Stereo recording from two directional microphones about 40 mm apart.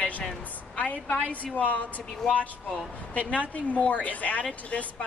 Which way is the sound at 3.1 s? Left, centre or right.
Left.